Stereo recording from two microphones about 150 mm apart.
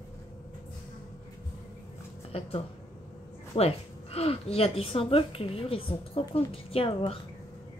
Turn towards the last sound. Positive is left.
turn(degrees=40)  # may be behind; listen again after turning